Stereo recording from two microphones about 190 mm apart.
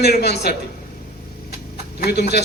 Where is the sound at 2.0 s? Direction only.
60° left (ahead or behind).